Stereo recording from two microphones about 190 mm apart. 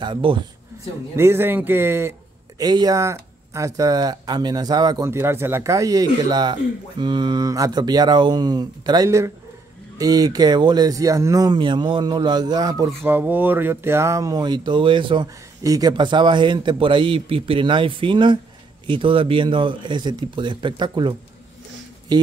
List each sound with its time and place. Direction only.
0.0 s speech: 25° right (ahead or behind)
1.1 s speech: 10° right (ahead or behind)
22.1 s speech: 20° right (ahead or behind)